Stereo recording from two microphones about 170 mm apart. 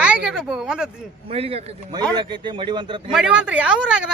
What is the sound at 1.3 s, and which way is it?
A man's voice, 35° right (ahead or behind).